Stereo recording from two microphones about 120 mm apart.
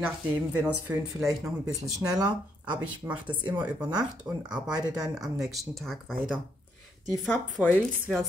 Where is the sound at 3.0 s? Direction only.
25° right (ahead or behind).